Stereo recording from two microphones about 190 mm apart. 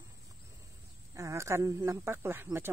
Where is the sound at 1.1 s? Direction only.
15° right (ahead or behind).